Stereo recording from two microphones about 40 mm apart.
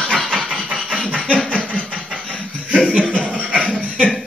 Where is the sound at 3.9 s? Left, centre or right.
Left.